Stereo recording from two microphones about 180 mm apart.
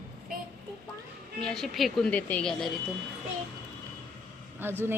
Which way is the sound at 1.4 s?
5° left (ahead or behind).